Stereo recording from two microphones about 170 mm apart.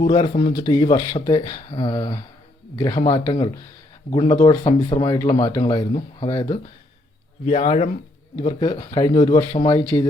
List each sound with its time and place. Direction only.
0.1 s speech: 30° left (ahead or behind)
4.1 s speech: 30° left (ahead or behind)
7.4 s speech: 35° left (ahead or behind)
8.4 s speech: 25° left (ahead or behind)